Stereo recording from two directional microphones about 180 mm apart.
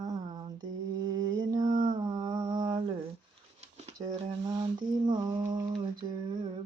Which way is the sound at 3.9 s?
25° right (ahead or behind).